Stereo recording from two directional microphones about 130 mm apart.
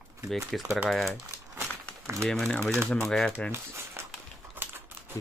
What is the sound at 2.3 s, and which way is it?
Speech, 5° left (ahead or behind).